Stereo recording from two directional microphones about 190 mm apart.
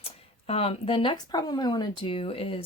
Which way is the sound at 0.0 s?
30° left (ahead or behind).